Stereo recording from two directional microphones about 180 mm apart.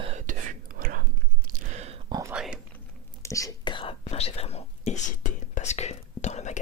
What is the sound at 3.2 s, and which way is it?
Whispering, 20° left (ahead or behind).